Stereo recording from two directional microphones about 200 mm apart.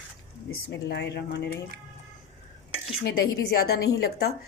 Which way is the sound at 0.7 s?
55° left (ahead or behind).